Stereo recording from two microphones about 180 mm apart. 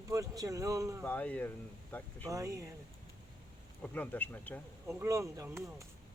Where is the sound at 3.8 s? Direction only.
10° left (ahead or behind).